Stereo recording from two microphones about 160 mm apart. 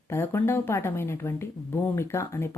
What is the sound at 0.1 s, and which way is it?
Speech, 15° left (ahead or behind).